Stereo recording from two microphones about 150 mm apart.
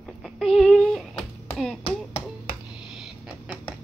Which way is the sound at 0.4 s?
Centre (ahead or behind).